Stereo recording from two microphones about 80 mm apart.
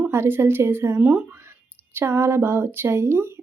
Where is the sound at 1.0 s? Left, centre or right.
Centre.